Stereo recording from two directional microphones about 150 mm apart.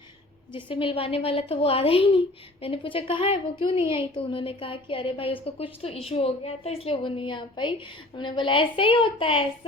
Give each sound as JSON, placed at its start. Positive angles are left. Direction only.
{"t": 0.5, "sound": "a woman's voice", "side_deg": 35}